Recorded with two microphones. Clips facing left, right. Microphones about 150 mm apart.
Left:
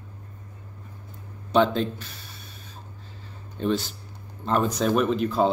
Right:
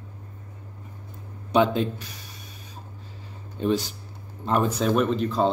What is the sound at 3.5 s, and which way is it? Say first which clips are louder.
Speech: right 1 dB; 5° right (ahead or behind).